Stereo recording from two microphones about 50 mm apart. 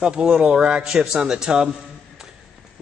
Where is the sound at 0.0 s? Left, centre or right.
Centre.